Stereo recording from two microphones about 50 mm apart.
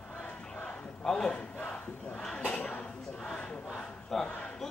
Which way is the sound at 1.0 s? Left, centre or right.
Centre.